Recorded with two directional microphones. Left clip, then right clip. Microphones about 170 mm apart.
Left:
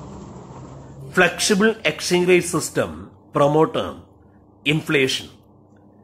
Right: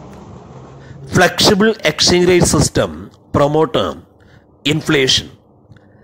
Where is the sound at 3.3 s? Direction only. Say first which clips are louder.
Right 4 dB; 35° right (ahead or behind).